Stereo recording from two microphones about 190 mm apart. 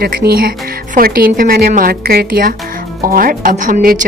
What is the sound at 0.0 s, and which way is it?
A woman's voice, 55° right (ahead or behind).